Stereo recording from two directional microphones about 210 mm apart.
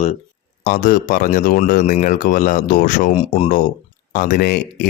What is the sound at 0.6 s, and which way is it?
Speech, 40° left (ahead or behind).